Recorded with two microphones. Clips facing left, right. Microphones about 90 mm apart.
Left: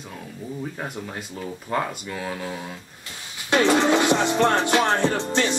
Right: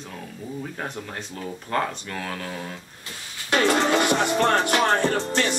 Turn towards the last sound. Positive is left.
turn(degrees=15)  # may be behind; listen again after turning